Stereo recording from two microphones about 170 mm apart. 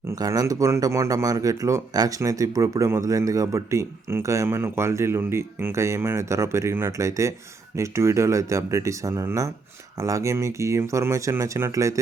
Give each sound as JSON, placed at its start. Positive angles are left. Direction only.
{"t": 0.1, "sound": "speech", "side_deg": -20}